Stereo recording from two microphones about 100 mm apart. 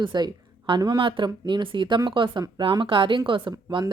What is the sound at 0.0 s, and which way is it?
Speech, 45° right (ahead or behind).